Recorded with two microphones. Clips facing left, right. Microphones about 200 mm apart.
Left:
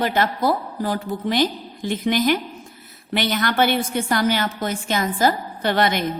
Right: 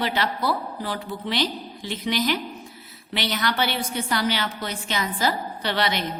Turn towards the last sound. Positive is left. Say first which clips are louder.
# left 5 dB
turn(degrees=50)  # may be behind; listen again after turning